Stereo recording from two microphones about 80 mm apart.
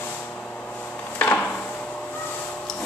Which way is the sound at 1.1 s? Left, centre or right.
Left.